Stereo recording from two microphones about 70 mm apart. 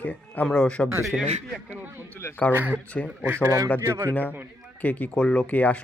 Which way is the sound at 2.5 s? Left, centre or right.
Right.